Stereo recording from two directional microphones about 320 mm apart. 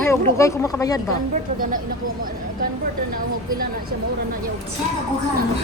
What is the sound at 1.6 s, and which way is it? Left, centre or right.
Speech, right.